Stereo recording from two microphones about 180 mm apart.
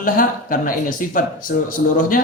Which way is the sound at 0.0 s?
50° left (ahead or behind).